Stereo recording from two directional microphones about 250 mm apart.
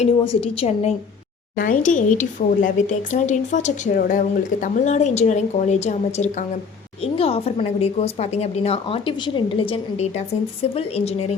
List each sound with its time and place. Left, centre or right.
0.3 s speech: left